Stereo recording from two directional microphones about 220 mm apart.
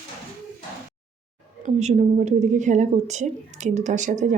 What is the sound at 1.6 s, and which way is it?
A woman's voice, 30° right (ahead or behind).